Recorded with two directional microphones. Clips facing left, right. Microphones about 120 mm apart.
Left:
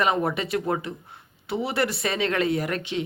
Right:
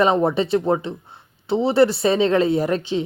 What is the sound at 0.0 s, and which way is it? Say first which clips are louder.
Speech: right 6 dB; 25° right (ahead or behind).